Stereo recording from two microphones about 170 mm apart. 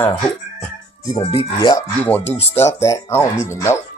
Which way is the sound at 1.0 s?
30° left (ahead or behind).